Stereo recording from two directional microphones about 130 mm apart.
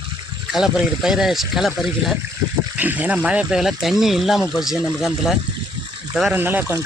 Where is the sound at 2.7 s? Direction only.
15° right (ahead or behind).